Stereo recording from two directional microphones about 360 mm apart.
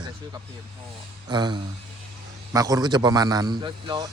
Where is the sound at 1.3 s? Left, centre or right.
Centre.